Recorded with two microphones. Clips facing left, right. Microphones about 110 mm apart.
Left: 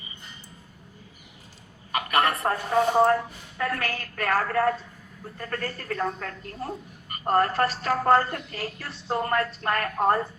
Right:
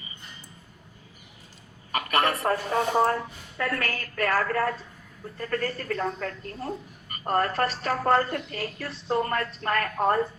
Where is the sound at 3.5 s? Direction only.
35° left (ahead or behind).